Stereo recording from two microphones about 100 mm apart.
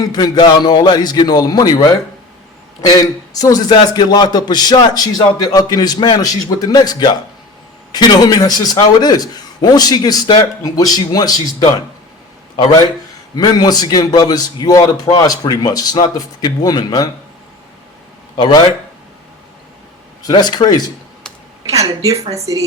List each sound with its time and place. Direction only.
0.0 s a man's voice: 40° left (ahead or behind)
13.3 s a man's voice: 40° left (ahead or behind)
18.3 s a man's voice: 45° left (ahead or behind)
20.2 s a man's voice: 45° left (ahead or behind)
21.8 s speech: 35° right (ahead or behind)